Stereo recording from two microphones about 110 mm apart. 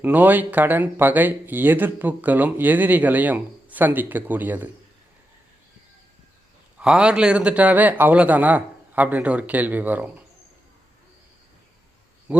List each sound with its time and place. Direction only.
0.0 s speech: 15° right (ahead or behind)
6.7 s speech: 10° right (ahead or behind)
12.3 s speech: 15° right (ahead or behind)